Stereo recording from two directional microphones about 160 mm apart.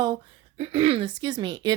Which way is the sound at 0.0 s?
25° right (ahead or behind).